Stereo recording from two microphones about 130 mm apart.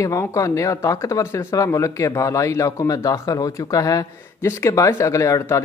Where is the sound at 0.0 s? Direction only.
25° left (ahead or behind).